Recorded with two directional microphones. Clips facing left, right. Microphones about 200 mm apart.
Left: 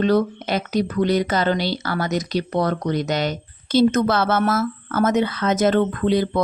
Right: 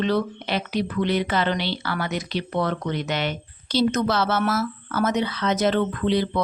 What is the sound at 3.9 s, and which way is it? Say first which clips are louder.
Speech: left 3 dB; 50° left (ahead or behind).